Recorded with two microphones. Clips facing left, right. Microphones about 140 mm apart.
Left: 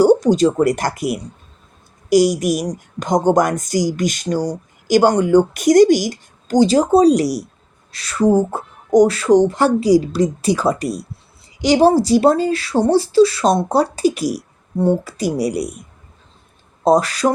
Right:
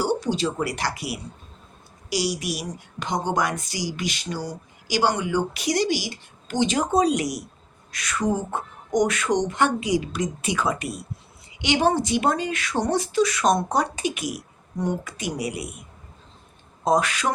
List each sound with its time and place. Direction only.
0.0 s a woman's voice: 45° left (ahead or behind)
16.8 s speech: 35° left (ahead or behind)